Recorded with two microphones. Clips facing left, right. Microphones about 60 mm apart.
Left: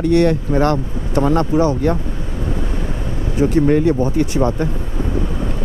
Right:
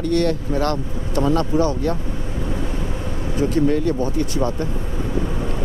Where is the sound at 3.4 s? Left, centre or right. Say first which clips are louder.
Left 5 dB; left.